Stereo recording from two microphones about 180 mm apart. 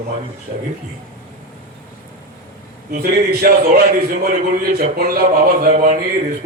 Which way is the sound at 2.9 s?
60° right (ahead or behind).